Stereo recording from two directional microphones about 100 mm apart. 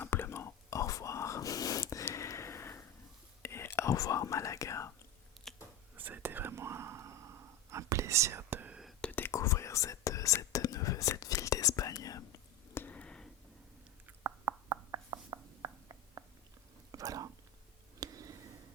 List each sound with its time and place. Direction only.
0.0 s whispering: 20° left (ahead or behind)
3.4 s speech: 25° left (ahead or behind)
6.0 s whispering: 20° right (ahead or behind)
9.0 s whispering: 15° left (ahead or behind)
9.3 s whispering: 30° left (ahead or behind)
12.7 s a sound: 15° left (ahead or behind)
14.3 s a sound: 30° right (ahead or behind)
16.9 s whispering: 40° right (ahead or behind)
18.0 s a sound: 35° right (ahead or behind)